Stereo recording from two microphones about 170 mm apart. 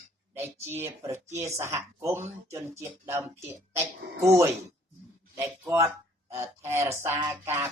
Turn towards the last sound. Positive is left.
turn(degrees=-15)  # may be behind; listen again after turning